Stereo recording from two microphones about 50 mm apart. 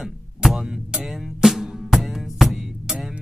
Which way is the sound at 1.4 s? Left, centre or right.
Centre.